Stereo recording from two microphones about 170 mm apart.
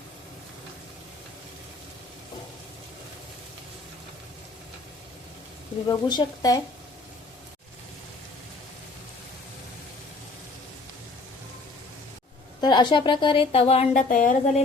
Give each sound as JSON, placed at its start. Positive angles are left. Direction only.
{"t": 5.9, "sound": "a woman's voice", "side_deg": 25}
{"t": 12.6, "sound": "a woman's voice", "side_deg": 25}
{"t": 14.1, "sound": "a woman's voice", "side_deg": 50}